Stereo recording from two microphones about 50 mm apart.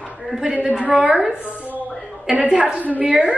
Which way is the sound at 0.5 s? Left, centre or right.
Right.